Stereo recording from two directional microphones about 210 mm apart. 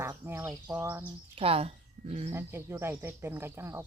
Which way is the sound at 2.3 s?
10° right (ahead or behind).